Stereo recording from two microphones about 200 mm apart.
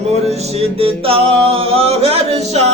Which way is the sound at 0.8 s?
30° right (ahead or behind).